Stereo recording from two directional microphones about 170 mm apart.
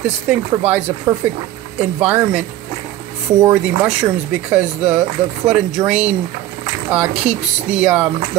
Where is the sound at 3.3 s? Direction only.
25° right (ahead or behind).